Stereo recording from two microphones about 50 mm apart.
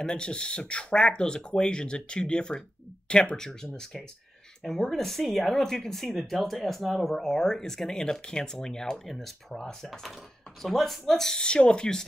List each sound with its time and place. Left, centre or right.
0.1 s speech: centre
11.3 s speech: centre